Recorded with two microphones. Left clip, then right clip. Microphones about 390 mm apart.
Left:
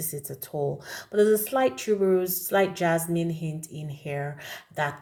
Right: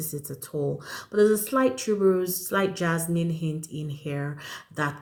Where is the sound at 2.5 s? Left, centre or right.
Left.